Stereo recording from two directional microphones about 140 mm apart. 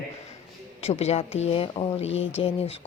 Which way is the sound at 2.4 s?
40° left (ahead or behind).